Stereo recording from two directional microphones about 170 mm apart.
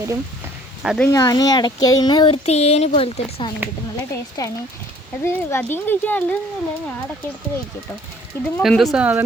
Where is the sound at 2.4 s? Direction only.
40° left (ahead or behind).